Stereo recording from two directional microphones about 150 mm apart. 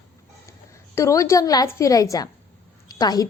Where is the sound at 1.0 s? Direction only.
20° left (ahead or behind).